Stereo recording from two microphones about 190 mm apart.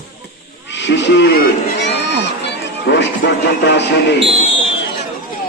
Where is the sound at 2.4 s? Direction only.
65° left (ahead or behind).